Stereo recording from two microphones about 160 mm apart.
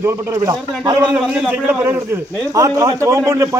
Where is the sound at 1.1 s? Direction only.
5° right (ahead or behind).